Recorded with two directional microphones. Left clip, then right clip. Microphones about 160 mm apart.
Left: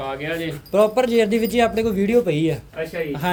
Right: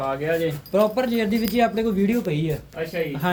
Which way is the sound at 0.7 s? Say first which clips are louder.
Left 5 dB; 60° left (ahead or behind).